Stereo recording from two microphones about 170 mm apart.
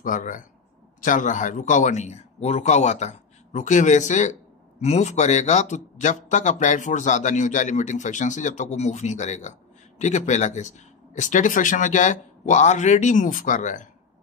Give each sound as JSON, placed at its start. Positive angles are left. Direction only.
{"t": 0.0, "sound": "a man's voice", "side_deg": 50}